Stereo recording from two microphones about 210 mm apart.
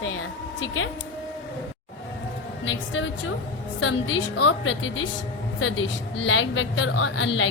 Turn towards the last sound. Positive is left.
turn(degrees=70)  # may be behind; listen again after turning